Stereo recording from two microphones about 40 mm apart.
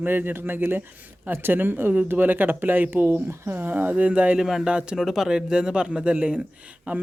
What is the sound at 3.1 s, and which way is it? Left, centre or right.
Speech, right.